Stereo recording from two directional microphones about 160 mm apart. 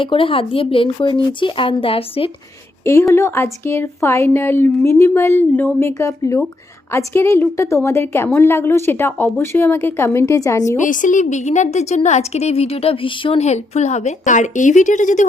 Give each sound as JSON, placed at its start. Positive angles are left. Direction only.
{"t": 0.0, "sound": "speech", "side_deg": 35}
{"t": 2.8, "sound": "speech", "side_deg": 20}
{"t": 10.8, "sound": "a woman's voice", "side_deg": 55}